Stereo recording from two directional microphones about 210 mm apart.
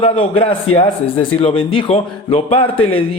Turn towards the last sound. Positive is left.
turn(degrees=25)  # may be behind; listen again after turning